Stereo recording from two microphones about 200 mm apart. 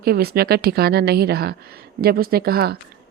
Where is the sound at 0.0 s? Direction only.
50° right (ahead or behind).